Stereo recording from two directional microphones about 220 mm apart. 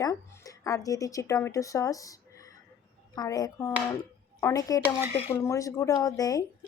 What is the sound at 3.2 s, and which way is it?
Speech, 15° left (ahead or behind).